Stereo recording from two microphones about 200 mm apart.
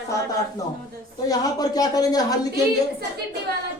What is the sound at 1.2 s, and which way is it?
A woman's voice, 15° left (ahead or behind).